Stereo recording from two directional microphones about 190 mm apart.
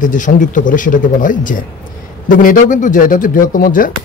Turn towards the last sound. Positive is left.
turn(degrees=45)  # may be behind; listen again after turning